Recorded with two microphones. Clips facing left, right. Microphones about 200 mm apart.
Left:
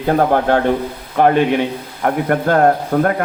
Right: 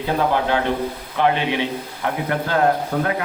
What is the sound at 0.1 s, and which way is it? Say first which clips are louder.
Speech: left 6 dB; 50° left (ahead or behind).